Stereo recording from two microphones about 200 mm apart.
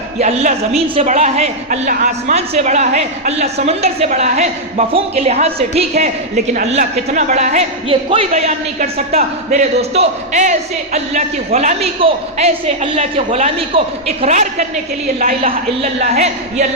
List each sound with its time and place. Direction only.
0.2 s a woman's voice: 35° right (ahead or behind)